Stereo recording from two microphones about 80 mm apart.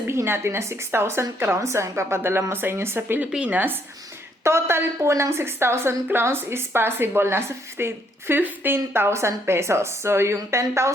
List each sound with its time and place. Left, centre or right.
0.1 s a woman's voice: right
4.4 s a woman's voice: right